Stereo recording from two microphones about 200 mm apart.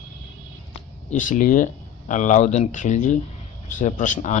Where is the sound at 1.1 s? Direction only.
40° left (ahead or behind).